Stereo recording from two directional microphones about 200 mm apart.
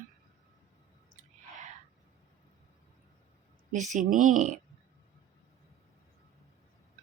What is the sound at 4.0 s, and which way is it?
Speech, 40° right (ahead or behind).